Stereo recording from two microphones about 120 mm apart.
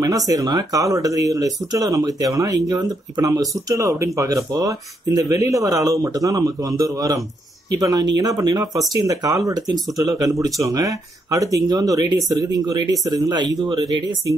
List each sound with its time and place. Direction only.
0.3 s speech: 30° right (ahead or behind)